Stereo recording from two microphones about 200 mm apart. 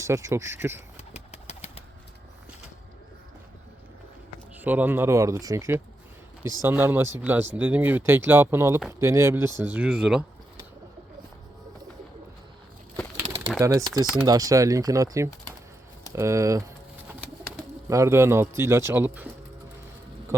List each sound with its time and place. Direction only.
0.0 s speech: 15° right (ahead or behind)
0.9 s engine: 30° left (ahead or behind)
4.5 s speech: 10° right (ahead or behind)
13.6 s speech: 15° right (ahead or behind)